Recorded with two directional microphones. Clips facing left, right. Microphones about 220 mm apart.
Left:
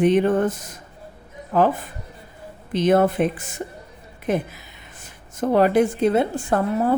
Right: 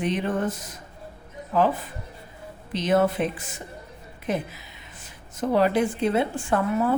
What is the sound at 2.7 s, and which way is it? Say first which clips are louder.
Speech: left 4 dB; 50° left (ahead or behind).